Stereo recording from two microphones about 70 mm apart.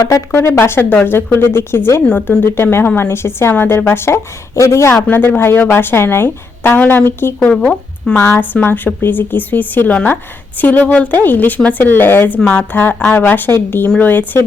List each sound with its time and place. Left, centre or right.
0.3 s a woman's voice: left
2.0 s a woman's voice: left
5.0 s a woman's voice: left
7.5 s speech: centre
8.1 s a woman's voice: left